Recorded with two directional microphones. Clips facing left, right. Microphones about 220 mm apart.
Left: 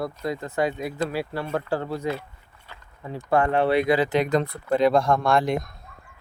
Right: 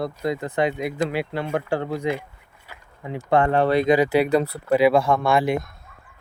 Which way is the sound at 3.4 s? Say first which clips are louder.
Right 1 dB; 40° right (ahead or behind).